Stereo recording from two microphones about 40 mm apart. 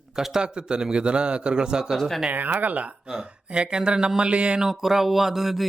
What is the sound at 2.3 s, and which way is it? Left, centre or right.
Speech, right.